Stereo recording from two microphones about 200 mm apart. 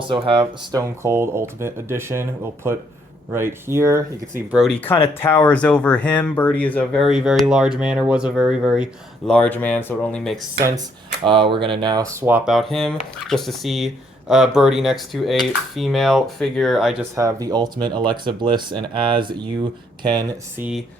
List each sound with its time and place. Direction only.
0.1 s speech: 25° right (ahead or behind)
3.3 s speech: 10° right (ahead or behind)
4.6 s speech: 5° left (ahead or behind)
10.6 s speech: 15° right (ahead or behind); by 16.9 s centre (ahead or behind)
17.0 s speech: 15° right (ahead or behind)
20.6 s speech: 5° right (ahead or behind)